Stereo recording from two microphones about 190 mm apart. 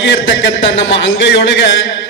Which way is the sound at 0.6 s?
85° left.